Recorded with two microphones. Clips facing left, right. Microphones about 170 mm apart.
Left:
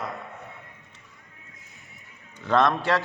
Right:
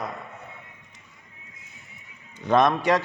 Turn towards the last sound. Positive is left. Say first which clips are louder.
# right 2 dB
turn(degrees=-15)  # may be behind; listen again after turning